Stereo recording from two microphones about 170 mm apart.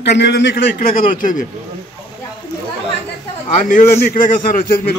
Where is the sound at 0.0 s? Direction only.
90° left; by 1.5 s 50° left (ahead or behind).